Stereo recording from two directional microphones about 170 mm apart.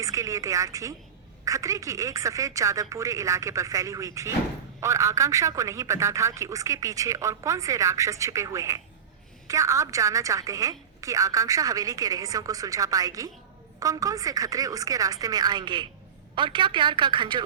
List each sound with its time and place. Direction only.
0.0 s speech: 20° right (ahead or behind)